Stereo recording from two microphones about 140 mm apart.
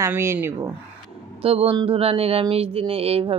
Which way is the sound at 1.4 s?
45° right (ahead or behind).